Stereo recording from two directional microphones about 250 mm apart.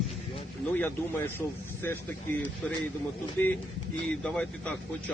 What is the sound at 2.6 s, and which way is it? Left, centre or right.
Speech, centre.